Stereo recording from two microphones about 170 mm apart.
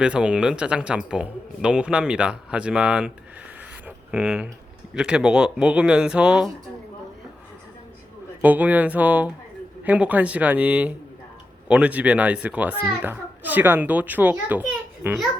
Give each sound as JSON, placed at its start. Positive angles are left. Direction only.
{"t": 0.0, "sound": "speech", "side_deg": -5}
{"t": 3.8, "sound": "a sound", "side_deg": -10}
{"t": 4.9, "sound": "speech", "side_deg": -5}
{"t": 8.4, "sound": "a child's voice", "side_deg": -10}